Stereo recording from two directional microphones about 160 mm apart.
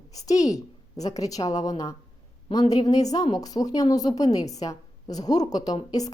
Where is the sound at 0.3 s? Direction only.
20° left (ahead or behind).